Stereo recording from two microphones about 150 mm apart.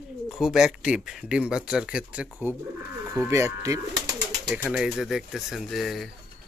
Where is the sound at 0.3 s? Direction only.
Centre (ahead or behind); by 3.8 s 20° right (ahead or behind).